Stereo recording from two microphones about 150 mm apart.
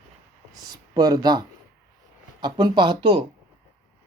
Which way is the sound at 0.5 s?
25° right (ahead or behind).